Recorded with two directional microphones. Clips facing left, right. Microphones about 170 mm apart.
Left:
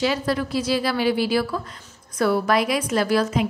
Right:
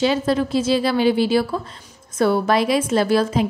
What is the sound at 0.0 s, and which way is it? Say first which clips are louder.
A woman's voice: right 4 dB; 25° right (ahead or behind).